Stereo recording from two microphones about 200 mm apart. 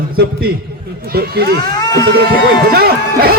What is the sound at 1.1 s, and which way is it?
Speech, 50° right (ahead or behind).